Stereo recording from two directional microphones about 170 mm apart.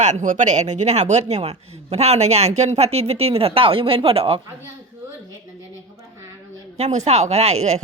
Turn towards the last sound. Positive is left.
turn(degrees=-40)  # may be behind; listen again after turning